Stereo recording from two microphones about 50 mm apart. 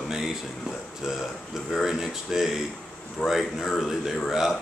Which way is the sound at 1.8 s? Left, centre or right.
Centre.